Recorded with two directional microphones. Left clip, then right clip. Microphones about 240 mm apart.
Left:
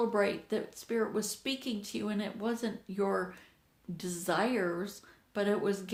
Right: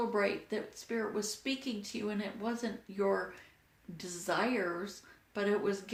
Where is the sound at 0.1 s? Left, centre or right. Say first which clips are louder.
Left 2 dB; left.